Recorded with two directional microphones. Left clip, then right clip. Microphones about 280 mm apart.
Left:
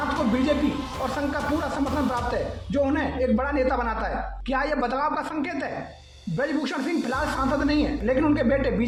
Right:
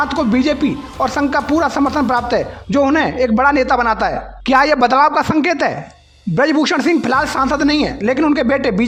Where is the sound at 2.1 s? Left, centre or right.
Right.